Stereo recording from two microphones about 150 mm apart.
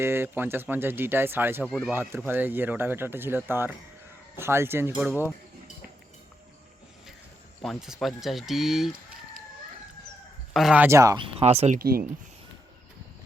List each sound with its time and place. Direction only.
0.0 s speech: 15° right (ahead or behind)
7.6 s speech: centre (ahead or behind)
10.5 s speech: centre (ahead or behind)
10.8 s speech: 20° right (ahead or behind)
11.3 s speech: 45° right (ahead or behind)
11.8 s speech: 80° right